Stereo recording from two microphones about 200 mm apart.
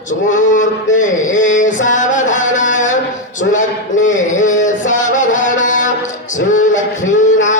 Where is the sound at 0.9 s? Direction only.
40° left (ahead or behind).